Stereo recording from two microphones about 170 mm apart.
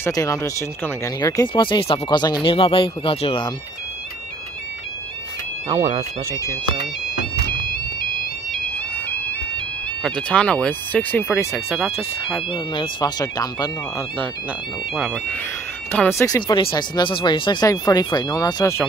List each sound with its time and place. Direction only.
0.0 s speech: 20° left (ahead or behind)
5.7 s speech: 20° right (ahead or behind)
8.5 s music: 10° left (ahead or behind)
10.0 s speech: 5° left (ahead or behind)
12.4 s speech: 30° left (ahead or behind)
15.0 s speech: 5° left (ahead or behind)
16.2 s speech: 20° left (ahead or behind)